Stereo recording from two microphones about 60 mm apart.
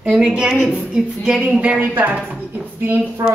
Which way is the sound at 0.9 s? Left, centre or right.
Centre.